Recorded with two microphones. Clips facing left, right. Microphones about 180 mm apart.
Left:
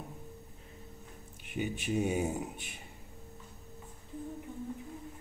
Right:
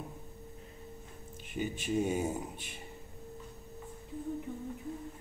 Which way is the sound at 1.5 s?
60° left (ahead or behind).